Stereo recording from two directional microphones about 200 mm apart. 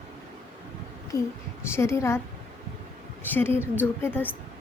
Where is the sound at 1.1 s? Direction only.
15° left (ahead or behind).